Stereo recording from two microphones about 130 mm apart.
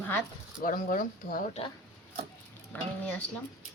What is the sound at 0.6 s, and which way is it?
Speech, 90° left.